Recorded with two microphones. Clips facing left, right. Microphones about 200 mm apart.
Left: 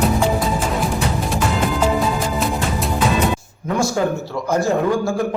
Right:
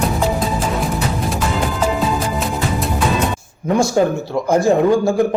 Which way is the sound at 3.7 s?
25° right (ahead or behind).